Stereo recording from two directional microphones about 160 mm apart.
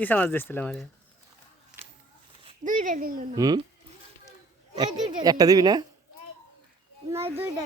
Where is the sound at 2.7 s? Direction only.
55° right (ahead or behind).